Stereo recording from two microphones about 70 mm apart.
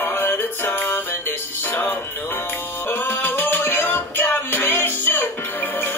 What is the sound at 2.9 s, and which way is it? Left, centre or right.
Music, left.